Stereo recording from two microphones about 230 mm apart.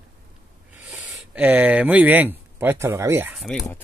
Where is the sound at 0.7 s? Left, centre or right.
Centre.